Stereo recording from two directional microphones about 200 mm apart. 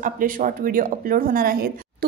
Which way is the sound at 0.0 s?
40° right (ahead or behind).